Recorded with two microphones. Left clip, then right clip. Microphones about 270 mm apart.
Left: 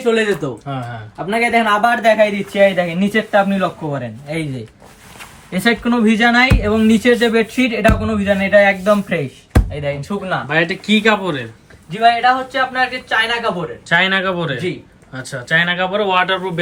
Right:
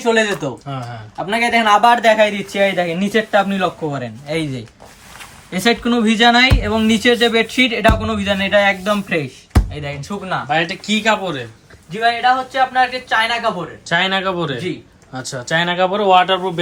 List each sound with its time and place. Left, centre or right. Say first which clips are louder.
0.0 s speech: right 1 dB; right
0.7 s speech: left 2 dB; centre
5.5 s speech: even; centre
13.9 s speech: left 2 dB; centre